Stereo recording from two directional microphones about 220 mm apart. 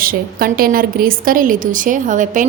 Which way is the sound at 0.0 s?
40° right (ahead or behind).